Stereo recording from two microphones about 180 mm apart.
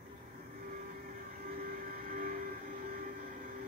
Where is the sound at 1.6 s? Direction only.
50° right (ahead or behind).